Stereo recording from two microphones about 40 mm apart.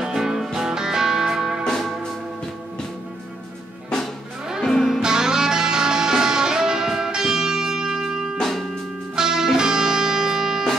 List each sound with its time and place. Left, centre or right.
0.0 s music: centre
1.6 s music: centre
4.6 s music: centre
5.0 s music: centre
8.4 s music: centre
9.1 s music: centre